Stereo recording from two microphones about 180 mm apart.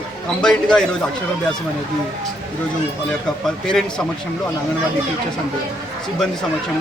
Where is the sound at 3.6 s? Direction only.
5° left (ahead or behind).